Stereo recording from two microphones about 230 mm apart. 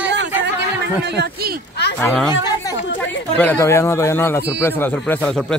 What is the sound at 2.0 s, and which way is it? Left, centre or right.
A man's voice, centre.